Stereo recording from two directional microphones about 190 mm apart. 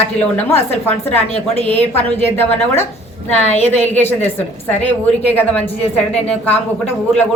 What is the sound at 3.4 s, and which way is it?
Speech, 35° left (ahead or behind).